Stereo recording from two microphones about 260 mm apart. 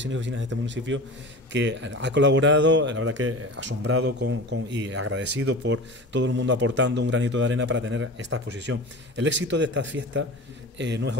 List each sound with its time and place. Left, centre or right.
0.0 s a man's voice: right